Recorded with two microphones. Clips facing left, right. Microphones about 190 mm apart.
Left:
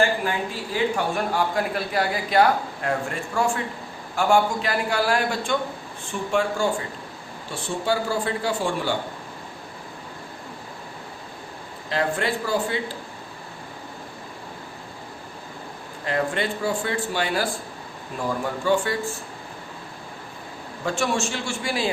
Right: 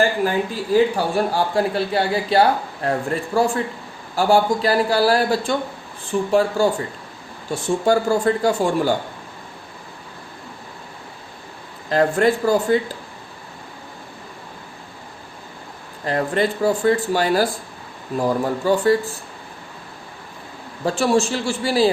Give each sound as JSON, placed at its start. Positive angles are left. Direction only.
{"t": 0.3, "sound": "a man's voice", "side_deg": -35}
{"t": 11.9, "sound": "speech", "side_deg": -45}
{"t": 16.0, "sound": "a man's voice", "side_deg": -40}
{"t": 20.8, "sound": "a man's voice", "side_deg": -35}